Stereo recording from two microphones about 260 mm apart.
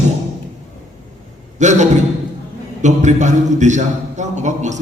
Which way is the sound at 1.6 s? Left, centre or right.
Right.